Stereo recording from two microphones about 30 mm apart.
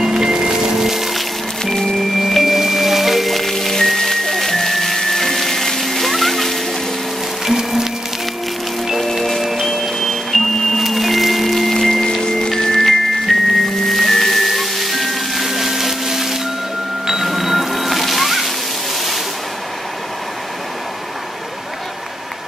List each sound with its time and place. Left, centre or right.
0.0 s music: centre
1.6 s music: centre
2.2 s music: centre
7.4 s music: centre
9.1 s music: centre
9.4 s a sound: centre
9.9 s a sound: centre
10.8 s music: centre
12.2 s music: left; by 16.3 s centre
17.0 s a sound: centre
17.3 s music: centre